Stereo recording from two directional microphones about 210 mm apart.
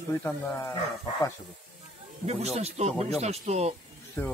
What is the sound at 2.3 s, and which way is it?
Speech, 30° right (ahead or behind).